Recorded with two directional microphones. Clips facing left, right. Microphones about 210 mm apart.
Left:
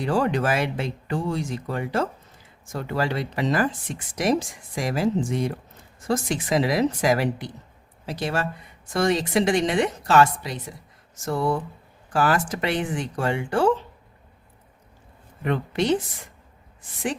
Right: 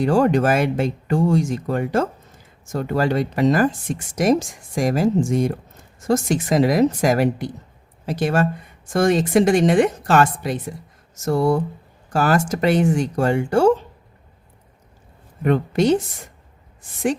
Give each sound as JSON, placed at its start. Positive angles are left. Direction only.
{"t": 0.0, "sound": "speech", "side_deg": -45}
{"t": 11.1, "sound": "a sound", "side_deg": -40}
{"t": 12.1, "sound": "speech", "side_deg": -45}
{"t": 15.4, "sound": "speech", "side_deg": -45}